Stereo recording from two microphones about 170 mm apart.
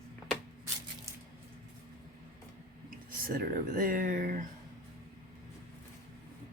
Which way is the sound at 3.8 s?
55° right (ahead or behind).